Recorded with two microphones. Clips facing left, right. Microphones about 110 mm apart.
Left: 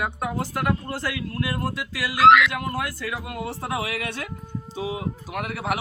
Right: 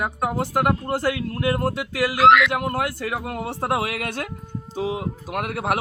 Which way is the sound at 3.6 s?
50° right (ahead or behind).